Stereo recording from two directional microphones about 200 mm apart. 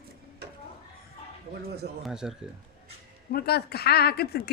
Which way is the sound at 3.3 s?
50° left (ahead or behind).